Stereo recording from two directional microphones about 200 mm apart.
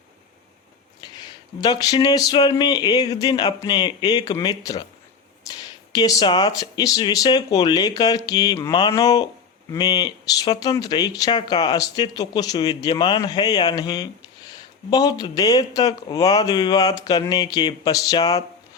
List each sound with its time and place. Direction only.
1.0 s speech: 20° left (ahead or behind)
5.5 s a sound: 15° left (ahead or behind)
5.9 s speech: 20° left (ahead or behind)